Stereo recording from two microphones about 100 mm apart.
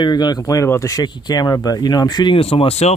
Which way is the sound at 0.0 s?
45° left (ahead or behind).